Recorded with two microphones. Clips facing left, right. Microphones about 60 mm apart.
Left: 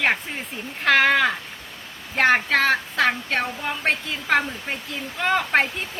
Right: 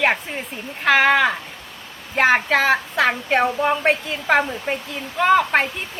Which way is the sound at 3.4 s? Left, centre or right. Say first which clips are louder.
Right 9 dB; right.